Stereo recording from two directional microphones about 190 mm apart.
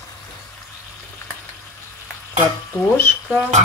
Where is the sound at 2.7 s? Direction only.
10° left (ahead or behind).